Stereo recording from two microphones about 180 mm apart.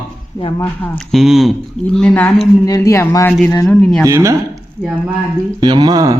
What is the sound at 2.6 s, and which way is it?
Speech, 20° left (ahead or behind).